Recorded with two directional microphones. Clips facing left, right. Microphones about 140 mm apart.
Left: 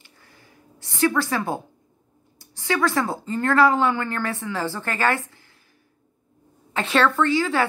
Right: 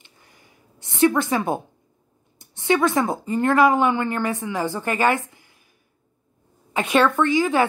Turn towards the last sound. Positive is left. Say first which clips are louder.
# right 2 dB
turn(degrees=-20)  # may be behind; listen again after turning